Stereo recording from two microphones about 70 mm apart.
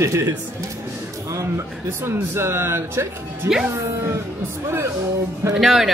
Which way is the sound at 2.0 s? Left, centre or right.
Right.